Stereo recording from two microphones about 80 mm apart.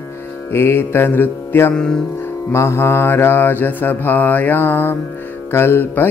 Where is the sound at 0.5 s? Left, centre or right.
Left.